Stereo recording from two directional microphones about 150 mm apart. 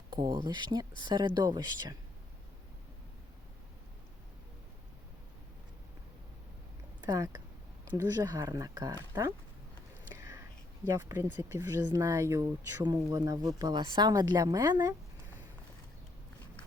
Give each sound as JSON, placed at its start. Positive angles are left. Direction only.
{"t": 0.1, "sound": "speech", "side_deg": -25}
{"t": 7.0, "sound": "speech", "side_deg": -25}
{"t": 10.2, "sound": "whispering", "side_deg": -20}
{"t": 10.8, "sound": "speech", "side_deg": -20}
{"t": 11.8, "sound": "speech", "side_deg": -25}